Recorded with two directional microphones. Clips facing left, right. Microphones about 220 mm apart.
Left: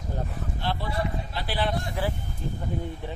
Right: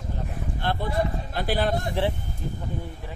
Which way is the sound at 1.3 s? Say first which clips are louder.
Right 6 dB; 45° right (ahead or behind).